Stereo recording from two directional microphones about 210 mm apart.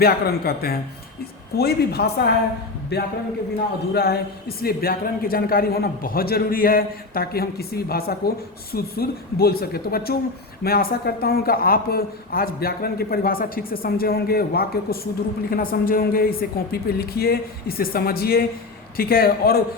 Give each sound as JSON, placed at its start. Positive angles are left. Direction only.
{"t": 0.0, "sound": "a man's voice", "side_deg": 45}